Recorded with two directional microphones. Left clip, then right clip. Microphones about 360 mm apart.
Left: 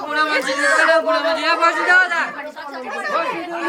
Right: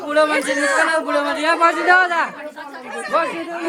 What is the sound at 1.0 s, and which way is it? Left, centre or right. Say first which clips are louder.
Speech: left 1 dB; centre.